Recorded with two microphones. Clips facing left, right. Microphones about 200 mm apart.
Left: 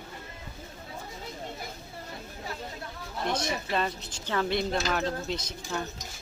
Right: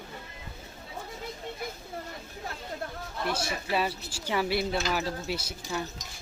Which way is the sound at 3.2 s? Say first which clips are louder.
Left 1 dB; 5° right (ahead or behind).